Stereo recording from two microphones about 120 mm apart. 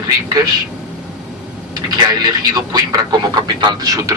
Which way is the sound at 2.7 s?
35° right (ahead or behind).